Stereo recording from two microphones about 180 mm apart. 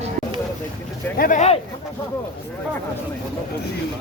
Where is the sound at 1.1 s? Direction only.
50° left (ahead or behind).